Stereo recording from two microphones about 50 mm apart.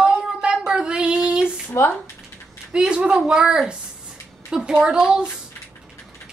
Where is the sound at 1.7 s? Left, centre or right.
Left.